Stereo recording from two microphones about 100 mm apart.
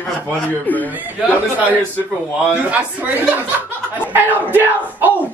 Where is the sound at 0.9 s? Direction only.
15° right (ahead or behind).